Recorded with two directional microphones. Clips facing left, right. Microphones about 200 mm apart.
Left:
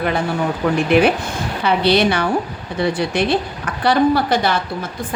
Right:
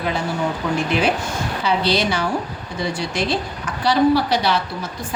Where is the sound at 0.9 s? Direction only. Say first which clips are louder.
Left 8 dB; 60° left (ahead or behind).